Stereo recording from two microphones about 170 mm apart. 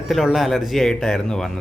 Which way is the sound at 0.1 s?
Centre (ahead or behind).